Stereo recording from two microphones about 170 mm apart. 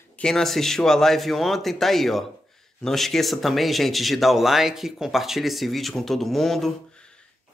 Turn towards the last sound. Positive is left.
turn(degrees=0)  # may be behind; listen again after turning